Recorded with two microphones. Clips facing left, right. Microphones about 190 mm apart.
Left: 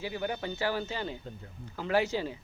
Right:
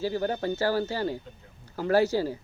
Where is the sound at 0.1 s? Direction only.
40° right (ahead or behind).